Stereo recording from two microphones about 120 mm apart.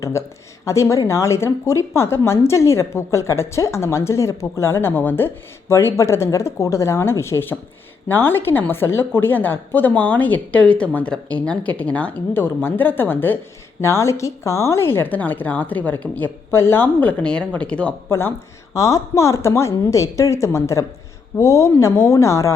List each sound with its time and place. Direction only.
0.0 s a woman's voice: 25° left (ahead or behind)
18.1 s speech: 20° left (ahead or behind)